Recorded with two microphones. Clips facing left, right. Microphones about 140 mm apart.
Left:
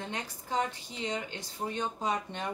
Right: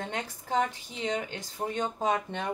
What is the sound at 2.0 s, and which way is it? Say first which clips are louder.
Speech: right 5 dB; 55° right (ahead or behind).